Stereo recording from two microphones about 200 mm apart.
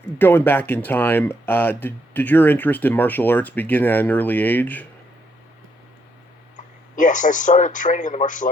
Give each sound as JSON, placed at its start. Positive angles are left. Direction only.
{"t": 0.2, "sound": "speech", "side_deg": 10}
{"t": 6.9, "sound": "a man's voice", "side_deg": 40}